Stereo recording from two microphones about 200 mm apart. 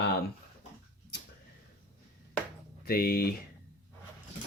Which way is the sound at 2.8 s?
50° left (ahead or behind).